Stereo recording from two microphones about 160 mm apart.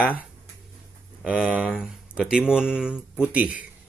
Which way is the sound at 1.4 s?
5° right (ahead or behind).